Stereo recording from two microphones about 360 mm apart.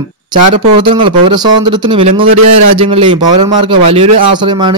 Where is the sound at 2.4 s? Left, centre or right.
Right.